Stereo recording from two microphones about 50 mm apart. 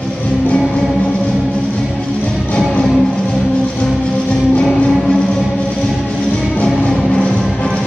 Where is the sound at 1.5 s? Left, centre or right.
Left.